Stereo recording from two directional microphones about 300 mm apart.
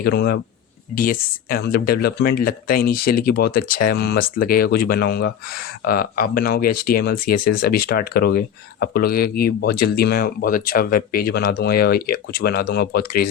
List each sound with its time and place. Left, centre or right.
0.0 s speech: left